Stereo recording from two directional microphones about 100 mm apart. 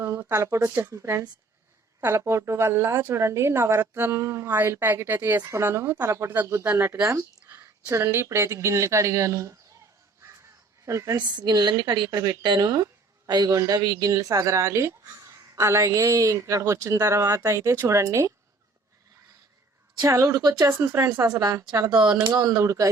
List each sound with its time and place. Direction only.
0.0 s a woman's voice: 25° right (ahead or behind)
6.7 s a woman's voice: 20° right (ahead or behind)
10.8 s a woman's voice: 30° right (ahead or behind)
11.3 s a woman's voice: 45° right (ahead or behind)
20.0 s a woman's voice: 30° right (ahead or behind)